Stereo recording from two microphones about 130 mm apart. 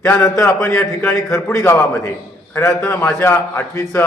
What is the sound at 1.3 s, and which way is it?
Speech, 20° left (ahead or behind).